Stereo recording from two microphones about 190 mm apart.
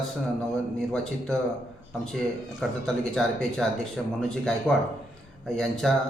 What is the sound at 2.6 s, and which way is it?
Speech, centre (ahead or behind).